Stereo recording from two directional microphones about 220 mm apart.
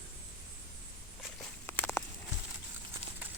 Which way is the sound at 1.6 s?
10° left (ahead or behind).